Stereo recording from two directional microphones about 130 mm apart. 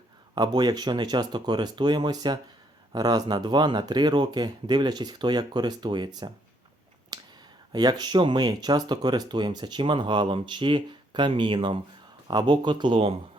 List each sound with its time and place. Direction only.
0.3 s speech: 30° right (ahead or behind)
7.1 s a sound: 30° right (ahead or behind)
7.7 s speech: 30° right (ahead or behind)